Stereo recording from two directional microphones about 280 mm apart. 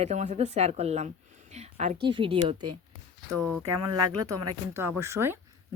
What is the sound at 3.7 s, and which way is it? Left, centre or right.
Speech, right.